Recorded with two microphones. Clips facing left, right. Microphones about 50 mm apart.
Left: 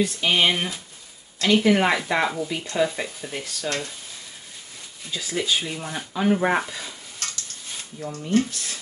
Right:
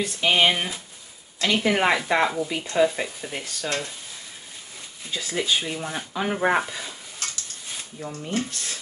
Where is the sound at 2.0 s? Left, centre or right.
Centre.